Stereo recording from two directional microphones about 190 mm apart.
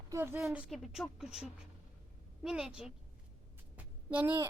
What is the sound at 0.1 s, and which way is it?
Speech, 15° right (ahead or behind).